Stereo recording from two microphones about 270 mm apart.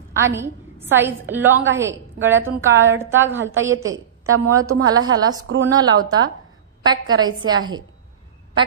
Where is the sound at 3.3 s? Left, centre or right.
Right.